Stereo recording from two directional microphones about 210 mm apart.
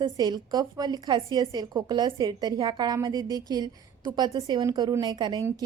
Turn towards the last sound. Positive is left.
turn(degrees=-20)  # may be behind; listen again after turning